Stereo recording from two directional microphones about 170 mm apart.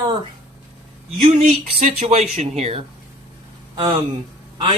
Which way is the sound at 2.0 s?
40° right (ahead or behind).